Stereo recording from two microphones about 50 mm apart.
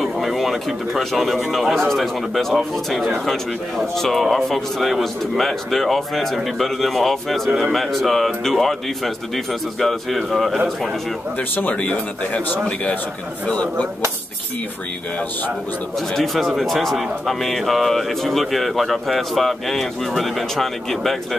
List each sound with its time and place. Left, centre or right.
0.0 s speech: centre
11.3 s speech: left
13.5 s speech: left
16.1 s speech: centre